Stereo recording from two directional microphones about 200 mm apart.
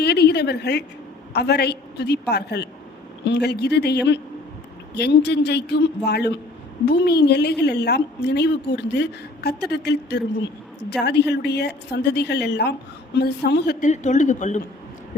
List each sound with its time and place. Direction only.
0.0 s a woman's voice: 55° left (ahead or behind)
13.8 s speech: 35° left (ahead or behind)